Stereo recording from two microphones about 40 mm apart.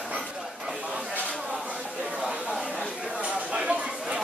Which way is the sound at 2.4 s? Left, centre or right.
Centre.